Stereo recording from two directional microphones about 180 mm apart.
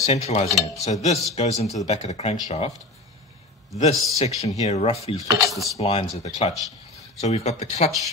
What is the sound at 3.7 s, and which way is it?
Speech, 35° left (ahead or behind).